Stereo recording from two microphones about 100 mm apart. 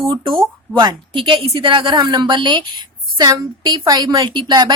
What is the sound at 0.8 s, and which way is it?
A woman's voice, 50° right (ahead or behind).